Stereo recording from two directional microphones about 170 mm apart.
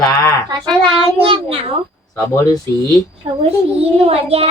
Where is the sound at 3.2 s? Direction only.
35° right (ahead or behind).